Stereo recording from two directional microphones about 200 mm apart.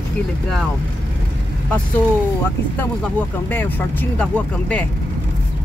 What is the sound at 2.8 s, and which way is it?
Speech, 10° left (ahead or behind).